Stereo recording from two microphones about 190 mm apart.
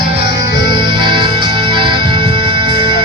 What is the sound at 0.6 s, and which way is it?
Music, 25° right (ahead or behind).